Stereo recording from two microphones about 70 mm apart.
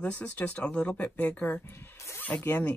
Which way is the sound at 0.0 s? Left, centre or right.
Centre.